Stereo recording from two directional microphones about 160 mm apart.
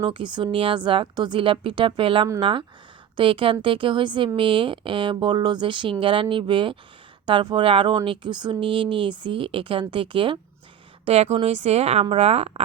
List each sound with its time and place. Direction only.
0.0 s speech: 30° right (ahead or behind)